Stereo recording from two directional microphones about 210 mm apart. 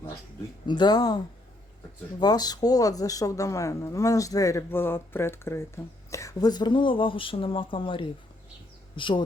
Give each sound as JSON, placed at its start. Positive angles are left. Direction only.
{"t": 0.7, "sound": "speech", "side_deg": 20}